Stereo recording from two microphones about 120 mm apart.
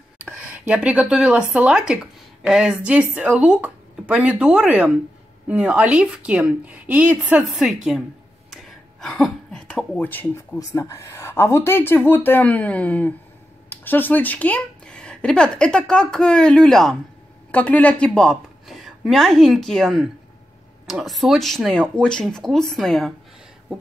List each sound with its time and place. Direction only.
0.2 s speech: 10° right (ahead or behind)
7.5 s speech: centre (ahead or behind)
8.5 s a sound: 5° left (ahead or behind)
10.6 s a woman's voice: 25° left (ahead or behind); by 23.1 s centre (ahead or behind)